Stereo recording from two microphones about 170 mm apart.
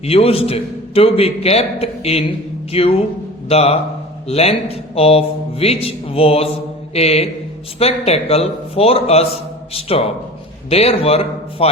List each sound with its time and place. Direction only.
0.0 s a man's voice: 35° left (ahead or behind)